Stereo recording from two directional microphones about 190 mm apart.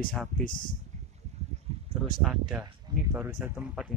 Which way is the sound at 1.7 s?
30° right (ahead or behind).